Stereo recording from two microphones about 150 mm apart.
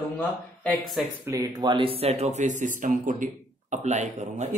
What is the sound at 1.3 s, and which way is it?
Speech, 30° right (ahead or behind).